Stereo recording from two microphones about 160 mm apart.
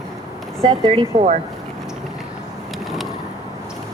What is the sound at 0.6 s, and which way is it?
Speech, 30° right (ahead or behind).